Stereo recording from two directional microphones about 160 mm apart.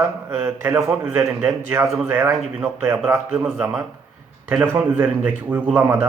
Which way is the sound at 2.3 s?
Centre (ahead or behind).